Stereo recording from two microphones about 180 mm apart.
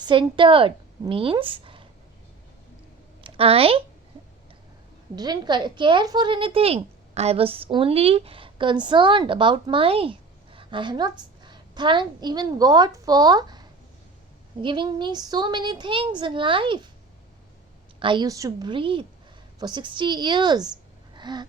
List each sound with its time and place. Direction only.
0.0 s speech: 25° right (ahead or behind)
3.2 s a woman's voice: 30° right (ahead or behind)
5.1 s a woman's voice: 25° right (ahead or behind)
18.0 s speech: 25° right (ahead or behind)
21.2 s a sound: 25° right (ahead or behind)